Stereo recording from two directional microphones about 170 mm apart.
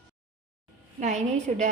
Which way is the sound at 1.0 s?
45° right (ahead or behind).